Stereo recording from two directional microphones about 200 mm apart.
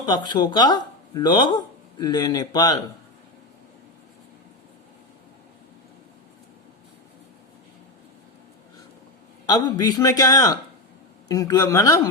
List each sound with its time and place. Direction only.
0.3 s speech: 20° left (ahead or behind)
9.5 s speech: 20° left (ahead or behind)